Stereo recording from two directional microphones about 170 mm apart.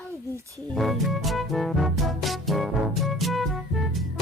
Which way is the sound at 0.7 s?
Centre (ahead or behind).